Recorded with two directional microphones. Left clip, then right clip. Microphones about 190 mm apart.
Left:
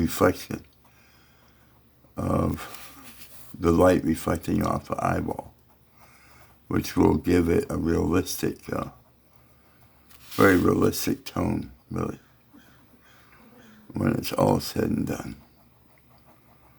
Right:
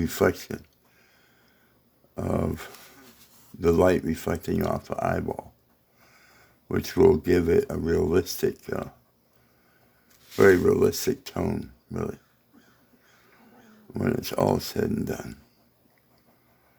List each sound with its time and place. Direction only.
0.0 s speech: 25° right (ahead or behind)
2.1 s speech: 30° right (ahead or behind)
6.7 s speech: 25° right (ahead or behind)
10.3 s speech: 25° right (ahead or behind)
13.9 s speech: 25° right (ahead or behind)